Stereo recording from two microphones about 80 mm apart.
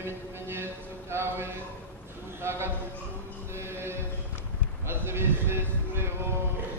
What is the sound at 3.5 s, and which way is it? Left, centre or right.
Music, right.